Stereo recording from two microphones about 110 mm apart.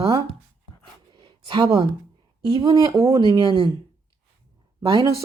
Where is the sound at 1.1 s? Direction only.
45° right (ahead or behind).